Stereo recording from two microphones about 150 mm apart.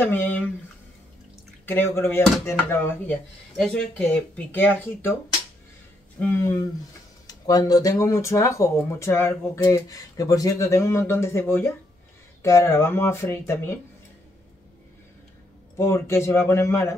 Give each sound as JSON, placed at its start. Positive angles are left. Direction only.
{"t": 0.0, "sound": "speech", "side_deg": 10}
{"t": 1.7, "sound": "speech", "side_deg": 15}
{"t": 6.1, "sound": "speech", "side_deg": 15}
{"t": 15.8, "sound": "speech", "side_deg": 20}